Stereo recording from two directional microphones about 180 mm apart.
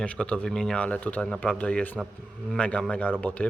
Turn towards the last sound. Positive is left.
turn(degrees=5)  # may be behind; listen again after turning